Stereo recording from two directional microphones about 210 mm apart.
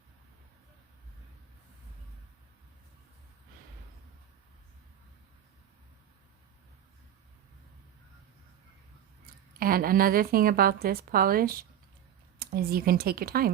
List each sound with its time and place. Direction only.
9.6 s a woman's voice: 45° right (ahead or behind)